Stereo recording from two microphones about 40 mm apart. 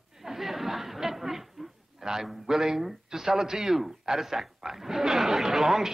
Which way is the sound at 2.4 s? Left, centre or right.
Centre.